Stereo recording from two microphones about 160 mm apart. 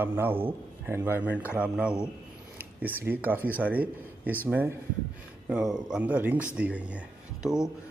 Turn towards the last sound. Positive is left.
turn(degrees=-5)  # may be behind; listen again after turning